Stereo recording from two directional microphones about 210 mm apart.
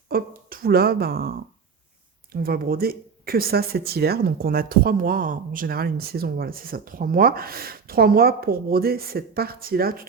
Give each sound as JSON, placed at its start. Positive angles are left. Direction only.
{"t": 0.1, "sound": "speech", "side_deg": -45}
{"t": 2.3, "sound": "speech", "side_deg": -45}